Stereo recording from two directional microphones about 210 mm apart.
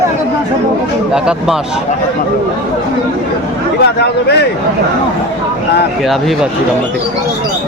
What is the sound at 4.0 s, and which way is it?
Speech, 50° left (ahead or behind).